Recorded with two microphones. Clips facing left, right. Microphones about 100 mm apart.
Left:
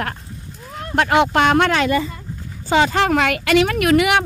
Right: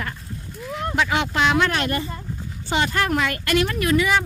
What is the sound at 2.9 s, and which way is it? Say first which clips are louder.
Speech: left 5 dB; 90° left.